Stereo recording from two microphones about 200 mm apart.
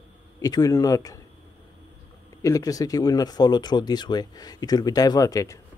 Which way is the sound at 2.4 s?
15° left (ahead or behind).